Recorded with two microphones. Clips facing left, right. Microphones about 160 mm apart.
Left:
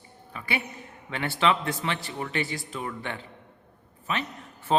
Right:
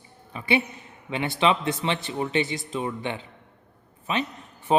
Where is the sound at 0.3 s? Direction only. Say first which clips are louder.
Right 7 dB; 20° right (ahead or behind).